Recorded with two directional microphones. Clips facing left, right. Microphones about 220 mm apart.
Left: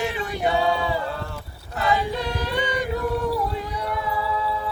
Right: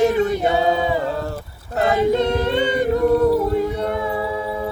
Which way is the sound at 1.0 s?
40° right (ahead or behind).